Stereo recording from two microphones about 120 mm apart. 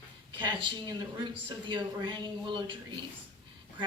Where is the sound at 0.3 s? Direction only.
40° right (ahead or behind).